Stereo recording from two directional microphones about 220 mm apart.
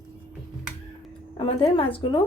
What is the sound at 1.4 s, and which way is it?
Speech, 25° left (ahead or behind).